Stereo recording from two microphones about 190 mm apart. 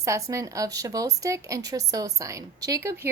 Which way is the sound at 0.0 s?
15° right (ahead or behind).